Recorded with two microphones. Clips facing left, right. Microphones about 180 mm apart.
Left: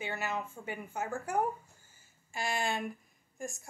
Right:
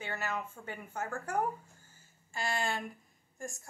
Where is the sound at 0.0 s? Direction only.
10° left (ahead or behind).